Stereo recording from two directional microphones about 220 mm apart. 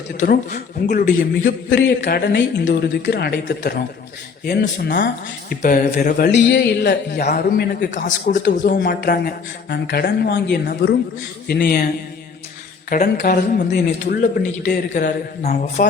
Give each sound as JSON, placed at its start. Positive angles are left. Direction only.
{"t": 0.1, "sound": "a man's voice", "side_deg": 45}